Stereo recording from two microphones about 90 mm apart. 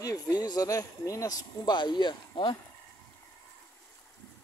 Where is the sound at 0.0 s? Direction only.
45° left (ahead or behind).